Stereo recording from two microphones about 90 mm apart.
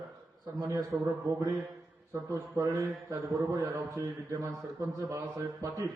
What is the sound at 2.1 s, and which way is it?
A man's voice, 35° right (ahead or behind).